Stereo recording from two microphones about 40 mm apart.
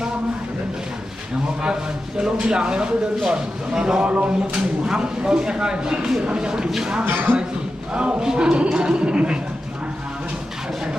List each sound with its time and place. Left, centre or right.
1.6 s speech: right
7.0 s speech: right
7.9 s speech: right